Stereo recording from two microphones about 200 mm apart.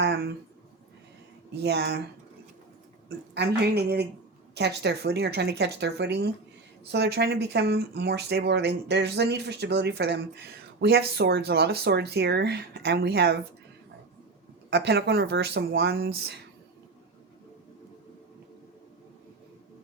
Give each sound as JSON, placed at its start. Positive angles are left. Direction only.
{"t": 1.6, "sound": "speech", "side_deg": -55}
{"t": 3.1, "sound": "a woman's voice", "side_deg": -55}
{"t": 14.7, "sound": "speech", "side_deg": -55}